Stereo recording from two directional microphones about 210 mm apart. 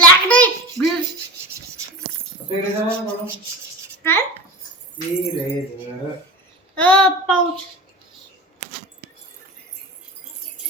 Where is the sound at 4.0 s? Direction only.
10° left (ahead or behind).